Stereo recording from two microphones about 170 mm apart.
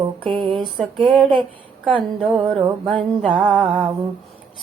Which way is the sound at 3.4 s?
Centre (ahead or behind).